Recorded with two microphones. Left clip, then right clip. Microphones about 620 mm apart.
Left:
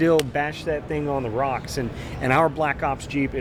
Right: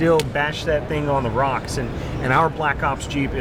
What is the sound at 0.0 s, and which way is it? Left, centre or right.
Speech, left.